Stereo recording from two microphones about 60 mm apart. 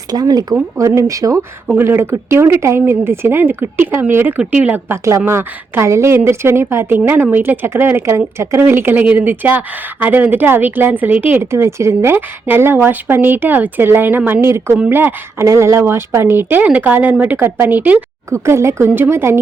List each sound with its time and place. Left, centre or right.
0.1 s speech: right
0.8 s speech: right
1.7 s a woman's voice: right
4.4 s a woman's voice: right
5.2 s a woman's voice: right
8.6 s a woman's voice: right
11.5 s a woman's voice: right
14.4 s a woman's voice: right
15.4 s a woman's voice: right
18.3 s a woman's voice: right